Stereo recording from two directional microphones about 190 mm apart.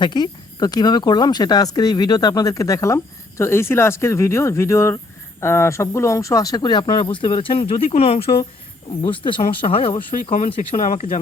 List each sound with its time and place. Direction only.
0.0 s speech: 20° left (ahead or behind)
10.8 s speech: 45° left (ahead or behind)